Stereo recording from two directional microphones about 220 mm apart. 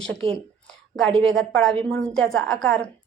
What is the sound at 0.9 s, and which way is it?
A woman's voice, 5° left (ahead or behind).